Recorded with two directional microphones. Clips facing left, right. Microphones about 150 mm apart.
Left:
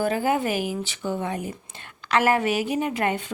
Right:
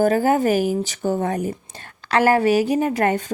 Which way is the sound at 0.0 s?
40° right (ahead or behind).